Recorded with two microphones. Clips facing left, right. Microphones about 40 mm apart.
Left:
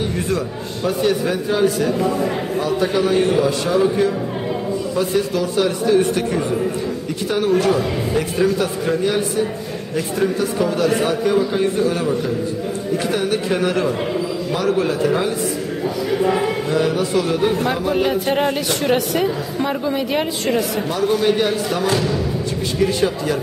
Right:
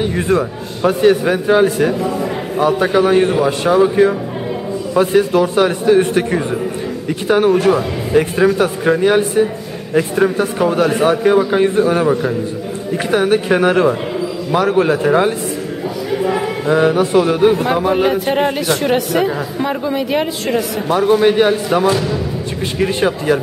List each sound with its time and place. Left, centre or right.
0.0 s a man's voice: right
2.0 s a man's voice: centre
2.6 s a man's voice: right
16.1 s a sound: centre
16.6 s a man's voice: right; by 20.6 s centre
20.9 s a man's voice: right